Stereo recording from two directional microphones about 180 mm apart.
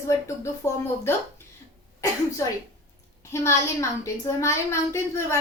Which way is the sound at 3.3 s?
15° left (ahead or behind).